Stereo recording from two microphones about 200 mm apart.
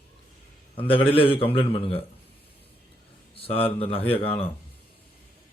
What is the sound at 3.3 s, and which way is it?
Speech, 30° left (ahead or behind).